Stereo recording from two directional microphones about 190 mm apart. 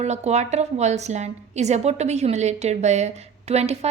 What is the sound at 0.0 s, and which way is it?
A woman's voice, 35° right (ahead or behind).